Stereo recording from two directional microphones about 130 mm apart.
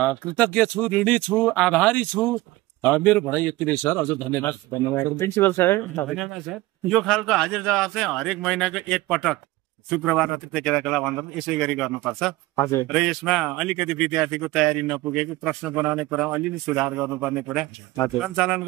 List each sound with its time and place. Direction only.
0.0 s speech: 10° left (ahead or behind)
6.0 s speech: centre (ahead or behind)
12.5 s speech: 25° left (ahead or behind)
12.8 s speech: centre (ahead or behind)